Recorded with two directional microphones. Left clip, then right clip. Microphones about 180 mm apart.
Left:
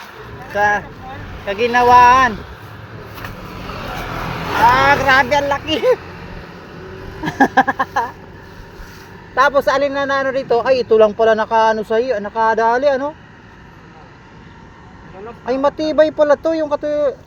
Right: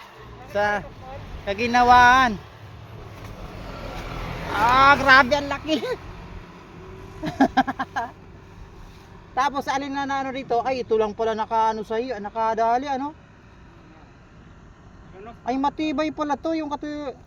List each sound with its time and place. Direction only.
0.5 s a man's voice: 40° right (ahead or behind)
4.7 s speech: 50° right (ahead or behind)
5.3 s a man's voice: 40° right (ahead or behind)
7.2 s a man's voice: 35° right (ahead or behind)
9.3 s a man's voice: 35° right (ahead or behind)
15.4 s a man's voice: 40° right (ahead or behind)